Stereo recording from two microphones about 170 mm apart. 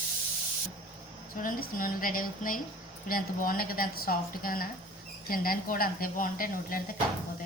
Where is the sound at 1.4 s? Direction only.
55° left (ahead or behind).